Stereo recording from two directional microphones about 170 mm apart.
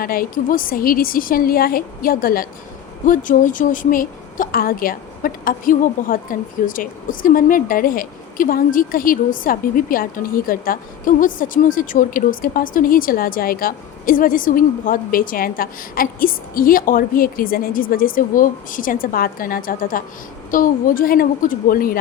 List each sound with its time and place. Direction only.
0.0 s a woman's voice: 55° left (ahead or behind)